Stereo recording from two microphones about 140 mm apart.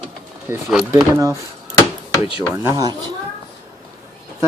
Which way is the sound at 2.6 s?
20° right (ahead or behind).